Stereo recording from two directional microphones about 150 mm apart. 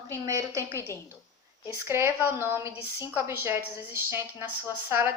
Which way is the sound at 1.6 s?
15° right (ahead or behind).